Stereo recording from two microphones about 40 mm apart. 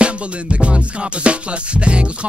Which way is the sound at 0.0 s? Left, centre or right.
Right.